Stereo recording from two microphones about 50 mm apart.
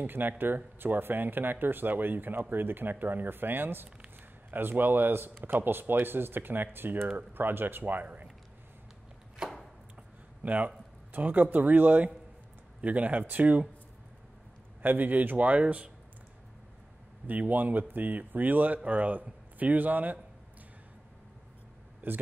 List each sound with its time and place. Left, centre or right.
0.0 s speech: right
9.4 s chopping: centre
10.4 s speech: right
14.8 s speech: right
17.3 s speech: right
22.0 s a man's voice: right